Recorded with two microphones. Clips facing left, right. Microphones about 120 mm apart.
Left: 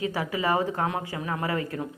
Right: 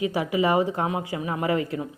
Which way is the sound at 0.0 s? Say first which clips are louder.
Right 4 dB; 15° right (ahead or behind).